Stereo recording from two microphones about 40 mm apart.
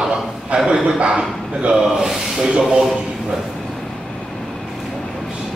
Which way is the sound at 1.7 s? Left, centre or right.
Centre.